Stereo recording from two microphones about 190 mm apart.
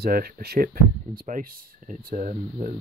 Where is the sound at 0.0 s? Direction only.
55° right (ahead or behind).